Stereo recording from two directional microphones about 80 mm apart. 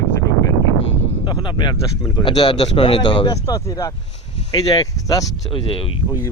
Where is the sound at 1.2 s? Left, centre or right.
Left.